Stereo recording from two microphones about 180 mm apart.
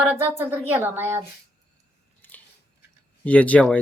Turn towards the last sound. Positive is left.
turn(degrees=5)  # may be behind; listen again after turning